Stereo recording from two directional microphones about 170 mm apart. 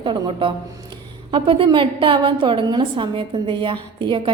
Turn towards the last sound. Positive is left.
turn(degrees=-30)  # may be behind; listen again after turning